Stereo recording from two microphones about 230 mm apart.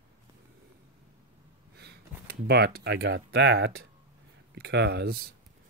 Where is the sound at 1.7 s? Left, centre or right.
Right.